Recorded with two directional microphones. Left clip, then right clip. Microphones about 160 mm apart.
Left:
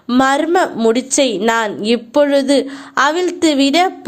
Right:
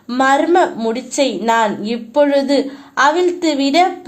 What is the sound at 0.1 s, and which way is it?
A woman's voice, 30° left (ahead or behind).